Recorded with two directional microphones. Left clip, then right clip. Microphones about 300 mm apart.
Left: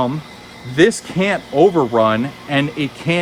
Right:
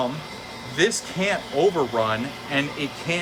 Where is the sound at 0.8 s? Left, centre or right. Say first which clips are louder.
Left 8 dB; centre.